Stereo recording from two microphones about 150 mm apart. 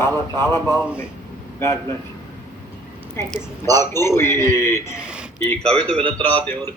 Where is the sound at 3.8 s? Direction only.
15° left (ahead or behind).